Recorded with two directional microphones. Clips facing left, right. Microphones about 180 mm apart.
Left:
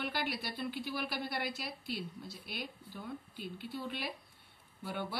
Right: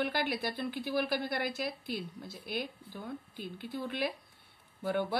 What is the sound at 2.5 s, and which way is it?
Speech, 45° right (ahead or behind).